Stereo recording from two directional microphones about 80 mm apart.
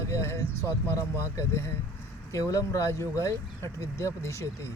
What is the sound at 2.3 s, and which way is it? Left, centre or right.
Speech, left.